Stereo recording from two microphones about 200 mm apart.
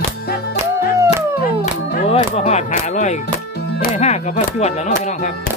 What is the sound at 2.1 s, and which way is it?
Music, 30° left (ahead or behind).